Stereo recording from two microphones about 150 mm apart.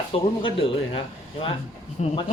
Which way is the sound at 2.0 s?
45° left (ahead or behind).